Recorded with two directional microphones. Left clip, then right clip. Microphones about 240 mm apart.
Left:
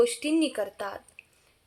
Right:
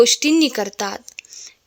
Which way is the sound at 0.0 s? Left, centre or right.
Right.